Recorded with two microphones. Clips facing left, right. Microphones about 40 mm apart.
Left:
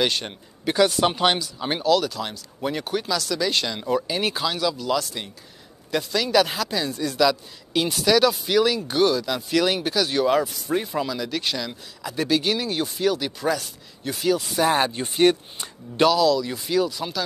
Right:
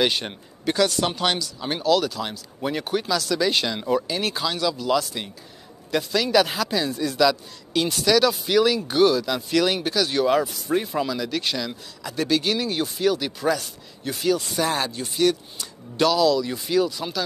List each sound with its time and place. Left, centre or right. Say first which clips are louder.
0.0 s speech: right 1 dB; centre
0.7 s speech: left 2 dB; centre
1.9 s speech: even; centre
14.7 s speech: left 4 dB; left
16.1 s speech: right 1 dB; centre